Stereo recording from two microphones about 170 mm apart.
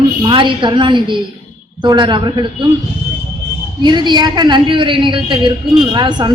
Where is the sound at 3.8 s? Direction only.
25° right (ahead or behind).